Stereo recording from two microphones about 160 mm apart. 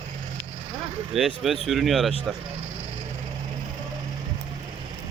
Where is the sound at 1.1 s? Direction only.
Centre (ahead or behind).